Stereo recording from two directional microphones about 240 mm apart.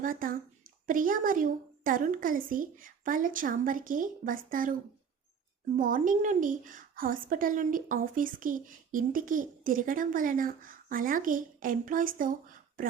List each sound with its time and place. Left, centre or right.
0.0 s speech: right